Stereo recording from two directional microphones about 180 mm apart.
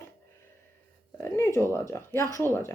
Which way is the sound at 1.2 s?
15° left (ahead or behind).